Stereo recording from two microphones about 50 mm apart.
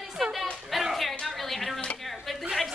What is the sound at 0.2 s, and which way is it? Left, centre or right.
Music, centre.